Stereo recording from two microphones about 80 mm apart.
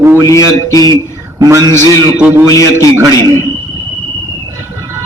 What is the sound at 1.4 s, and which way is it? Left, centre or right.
Speech, right.